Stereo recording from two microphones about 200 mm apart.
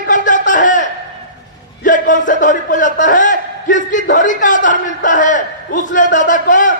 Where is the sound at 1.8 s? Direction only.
40° left (ahead or behind).